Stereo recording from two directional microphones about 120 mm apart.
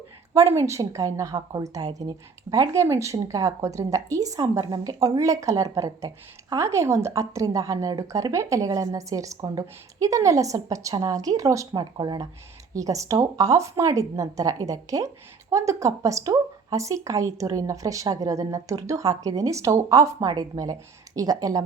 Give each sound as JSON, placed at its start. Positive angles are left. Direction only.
{"t": 0.3, "sound": "a woman's voice", "side_deg": -25}